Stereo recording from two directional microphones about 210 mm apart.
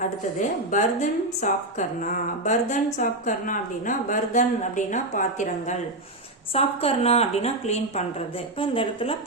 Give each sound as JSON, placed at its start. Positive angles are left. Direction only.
{"t": 0.7, "sound": "a woman's voice", "side_deg": 35}